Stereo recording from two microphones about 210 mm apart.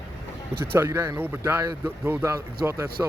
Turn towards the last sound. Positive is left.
turn(degrees=-15)  # may be behind; listen again after turning